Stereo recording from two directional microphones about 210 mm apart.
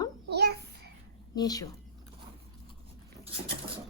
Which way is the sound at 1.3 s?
20° left (ahead or behind).